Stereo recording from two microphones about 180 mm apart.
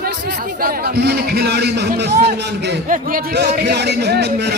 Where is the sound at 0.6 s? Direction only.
55° right (ahead or behind).